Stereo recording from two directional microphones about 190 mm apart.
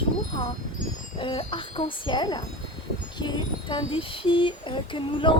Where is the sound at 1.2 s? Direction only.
25° left (ahead or behind).